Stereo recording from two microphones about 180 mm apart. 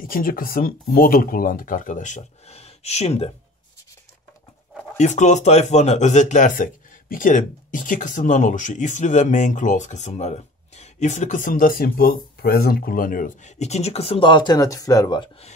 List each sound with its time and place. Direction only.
0.0 s speech: 50° left (ahead or behind)
4.9 s speech: 40° left (ahead or behind); by 15.2 s 20° left (ahead or behind)